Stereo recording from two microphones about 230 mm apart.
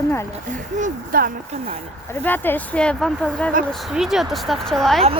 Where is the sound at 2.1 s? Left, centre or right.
Centre.